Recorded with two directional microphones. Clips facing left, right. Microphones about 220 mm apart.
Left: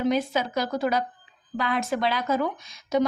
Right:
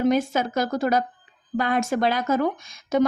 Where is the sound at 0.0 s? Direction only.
50° right (ahead or behind).